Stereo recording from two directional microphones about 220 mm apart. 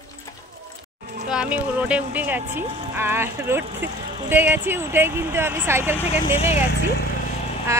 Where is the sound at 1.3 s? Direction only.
5° right (ahead or behind).